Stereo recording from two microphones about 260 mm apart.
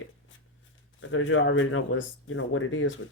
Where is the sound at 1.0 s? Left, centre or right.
Left.